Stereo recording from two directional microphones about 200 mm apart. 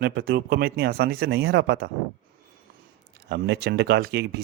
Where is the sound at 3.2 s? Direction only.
60° right (ahead or behind).